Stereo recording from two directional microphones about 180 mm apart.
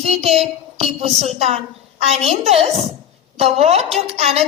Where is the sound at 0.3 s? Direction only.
35° right (ahead or behind).